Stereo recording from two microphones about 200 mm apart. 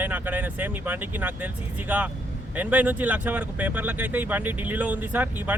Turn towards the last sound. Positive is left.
turn(degrees=-10)  # may be behind; listen again after turning